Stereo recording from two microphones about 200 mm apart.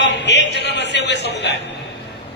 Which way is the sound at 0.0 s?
60° left (ahead or behind).